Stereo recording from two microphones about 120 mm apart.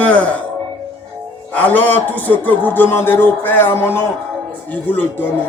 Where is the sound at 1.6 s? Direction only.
15° left (ahead or behind).